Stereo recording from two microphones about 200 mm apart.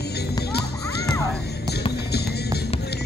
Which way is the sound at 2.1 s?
55° left (ahead or behind).